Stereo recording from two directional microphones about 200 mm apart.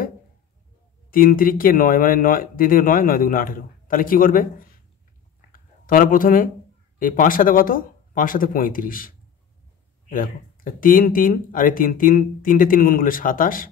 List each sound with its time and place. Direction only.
1.1 s speech: 45° left (ahead or behind)